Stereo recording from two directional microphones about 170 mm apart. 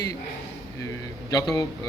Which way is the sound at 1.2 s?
20° left (ahead or behind).